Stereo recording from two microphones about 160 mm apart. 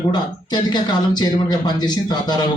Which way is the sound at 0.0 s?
25° left (ahead or behind).